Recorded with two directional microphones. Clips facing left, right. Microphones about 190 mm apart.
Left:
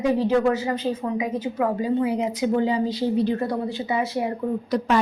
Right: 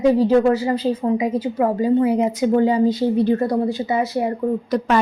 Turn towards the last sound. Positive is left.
turn(degrees=-60)  # may be behind; listen again after turning